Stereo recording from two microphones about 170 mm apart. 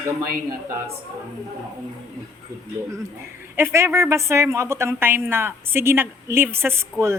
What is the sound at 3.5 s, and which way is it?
A woman's voice, 15° right (ahead or behind).